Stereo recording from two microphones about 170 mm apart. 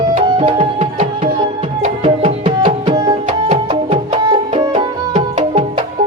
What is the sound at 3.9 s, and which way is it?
Music, 30° right (ahead or behind).